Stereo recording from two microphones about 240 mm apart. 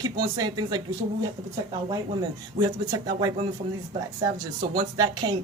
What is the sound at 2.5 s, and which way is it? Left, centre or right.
Speech, centre.